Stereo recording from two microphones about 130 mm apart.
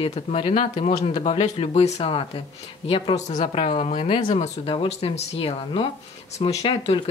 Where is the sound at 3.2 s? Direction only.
60° left (ahead or behind).